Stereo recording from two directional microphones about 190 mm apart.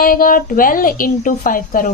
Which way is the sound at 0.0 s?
45° left (ahead or behind).